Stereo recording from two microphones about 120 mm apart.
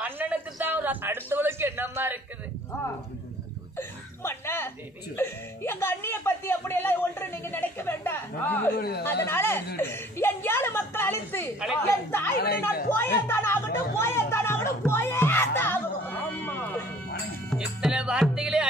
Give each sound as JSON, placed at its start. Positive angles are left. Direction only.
{"t": 0.0, "sound": "a man's voice", "side_deg": -15}
{"t": 3.7, "sound": "chuckle", "side_deg": 20}
{"t": 5.1, "sound": "speech", "side_deg": 20}
{"t": 17.6, "sound": "music", "side_deg": -10}